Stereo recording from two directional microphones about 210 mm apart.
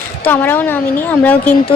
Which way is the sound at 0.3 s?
10° left (ahead or behind).